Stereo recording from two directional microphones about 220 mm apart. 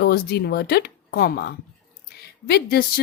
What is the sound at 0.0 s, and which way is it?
Speech, 45° left (ahead or behind).